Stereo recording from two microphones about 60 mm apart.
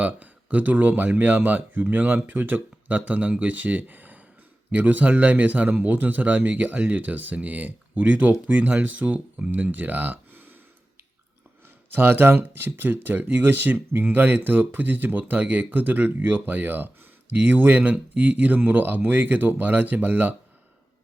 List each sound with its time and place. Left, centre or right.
0.0 s a man's voice: right
11.9 s a man's voice: right